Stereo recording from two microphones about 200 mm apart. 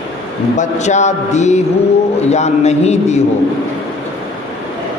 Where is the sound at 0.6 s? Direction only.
35° left (ahead or behind).